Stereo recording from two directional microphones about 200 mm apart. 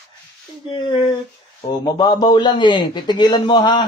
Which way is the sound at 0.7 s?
20° left (ahead or behind).